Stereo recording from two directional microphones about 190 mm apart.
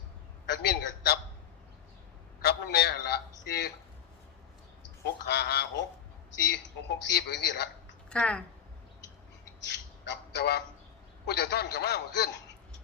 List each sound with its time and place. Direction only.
0.4 s a man's voice: 60° left (ahead or behind)
2.4 s a sound: 55° left (ahead or behind)
5.0 s a man's voice: 60° left (ahead or behind)
8.1 s speech: 5° left (ahead or behind)
9.6 s a sound: 65° left (ahead or behind)
11.3 s a man's voice: 60° left (ahead or behind)